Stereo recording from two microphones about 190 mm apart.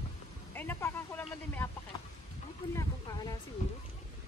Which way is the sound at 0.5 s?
10° left (ahead or behind).